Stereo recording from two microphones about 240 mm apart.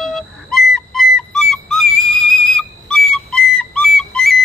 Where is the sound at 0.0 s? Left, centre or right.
Centre.